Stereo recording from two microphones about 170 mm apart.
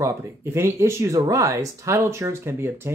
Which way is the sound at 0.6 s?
15° right (ahead or behind).